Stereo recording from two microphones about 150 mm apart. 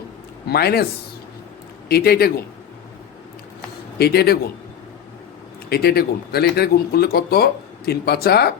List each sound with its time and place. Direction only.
0.4 s speech: 90° left
1.9 s speech: 90° left
3.9 s a man's voice: 90° left
5.6 s speech: 90° left